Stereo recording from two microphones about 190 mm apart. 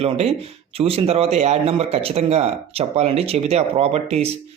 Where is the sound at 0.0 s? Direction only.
30° right (ahead or behind).